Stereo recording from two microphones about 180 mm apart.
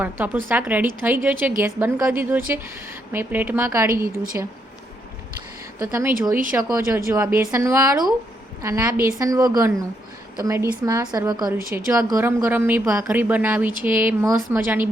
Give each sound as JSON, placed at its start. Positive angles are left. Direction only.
{"t": 0.0, "sound": "speech", "side_deg": -10}
{"t": 5.8, "sound": "a woman's voice", "side_deg": -15}